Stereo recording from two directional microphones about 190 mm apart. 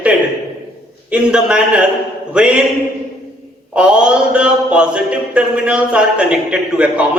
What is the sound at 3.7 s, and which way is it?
Mantra, 5° right (ahead or behind).